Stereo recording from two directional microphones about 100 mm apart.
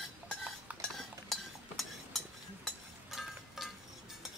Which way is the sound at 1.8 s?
Centre (ahead or behind).